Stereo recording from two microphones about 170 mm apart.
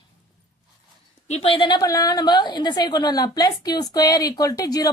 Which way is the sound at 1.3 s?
35° left (ahead or behind).